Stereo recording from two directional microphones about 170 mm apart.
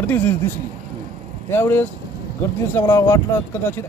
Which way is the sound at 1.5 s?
10° left (ahead or behind).